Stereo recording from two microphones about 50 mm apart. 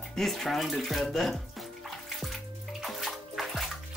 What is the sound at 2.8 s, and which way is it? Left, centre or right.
Bathtub, centre.